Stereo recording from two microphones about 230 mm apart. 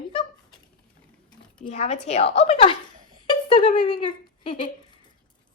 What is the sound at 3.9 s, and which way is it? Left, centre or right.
Speech, left.